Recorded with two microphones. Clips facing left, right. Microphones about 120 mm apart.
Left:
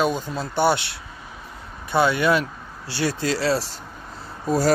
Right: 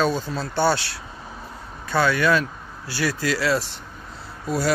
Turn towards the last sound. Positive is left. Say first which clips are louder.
# left 3 dB
turn(degrees=40)  # may be behind; listen again after turning